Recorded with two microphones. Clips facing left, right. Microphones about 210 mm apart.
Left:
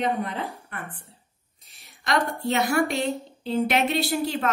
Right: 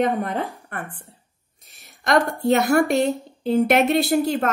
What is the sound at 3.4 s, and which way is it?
A woman's voice, 50° right (ahead or behind).